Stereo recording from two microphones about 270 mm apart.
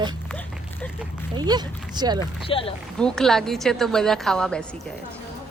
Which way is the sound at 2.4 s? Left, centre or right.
Centre.